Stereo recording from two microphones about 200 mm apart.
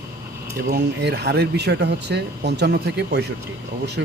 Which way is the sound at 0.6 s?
55° right (ahead or behind).